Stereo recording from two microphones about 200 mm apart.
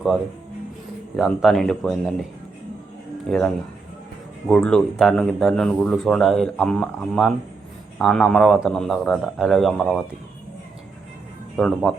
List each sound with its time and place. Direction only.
1.1 s speech: centre (ahead or behind)
3.2 s speech: 5° left (ahead or behind)
11.5 s speech: centre (ahead or behind)